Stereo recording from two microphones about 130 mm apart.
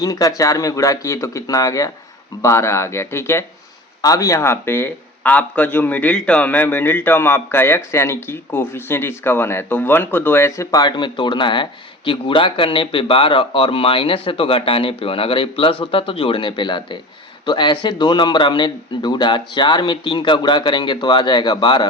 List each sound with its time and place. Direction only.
0.0 s a man's voice: 25° left (ahead or behind)